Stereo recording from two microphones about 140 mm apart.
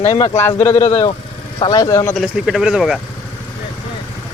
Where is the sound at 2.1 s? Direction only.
Centre (ahead or behind).